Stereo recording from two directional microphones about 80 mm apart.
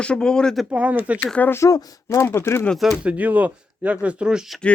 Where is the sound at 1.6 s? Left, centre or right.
Left.